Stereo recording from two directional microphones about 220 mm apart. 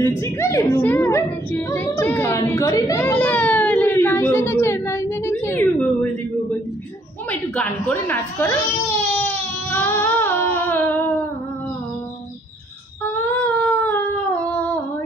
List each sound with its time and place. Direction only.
0.2 s a sound: 10° left (ahead or behind)
7.2 s a woman's voice: 5° left (ahead or behind)
9.7 s music: 10° left (ahead or behind)
13.0 s humming: 10° left (ahead or behind)